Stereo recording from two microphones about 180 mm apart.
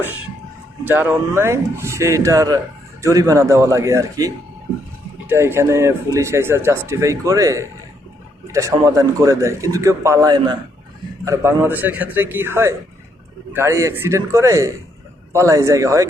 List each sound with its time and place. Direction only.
0.9 s speech: 10° right (ahead or behind)